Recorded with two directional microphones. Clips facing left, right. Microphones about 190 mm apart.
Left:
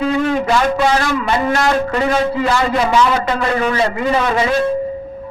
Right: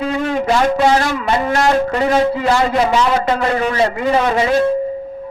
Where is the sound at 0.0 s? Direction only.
30° right (ahead or behind).